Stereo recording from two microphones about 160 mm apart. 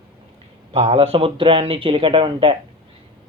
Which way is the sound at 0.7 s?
40° right (ahead or behind).